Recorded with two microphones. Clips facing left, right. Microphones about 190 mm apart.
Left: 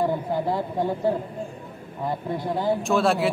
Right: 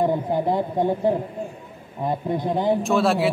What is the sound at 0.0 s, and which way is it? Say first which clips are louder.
A man's voice: right 3 dB; 20° right (ahead or behind).